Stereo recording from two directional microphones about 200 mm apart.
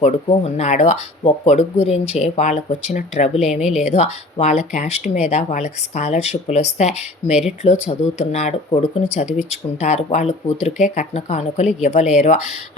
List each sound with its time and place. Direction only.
0.0 s speech: 30° left (ahead or behind)